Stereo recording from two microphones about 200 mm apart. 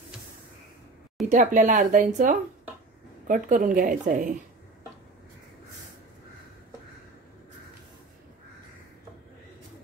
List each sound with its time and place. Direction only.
1.3 s a woman's voice: 40° right (ahead or behind)